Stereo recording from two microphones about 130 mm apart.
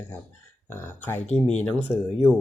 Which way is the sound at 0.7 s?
15° left (ahead or behind).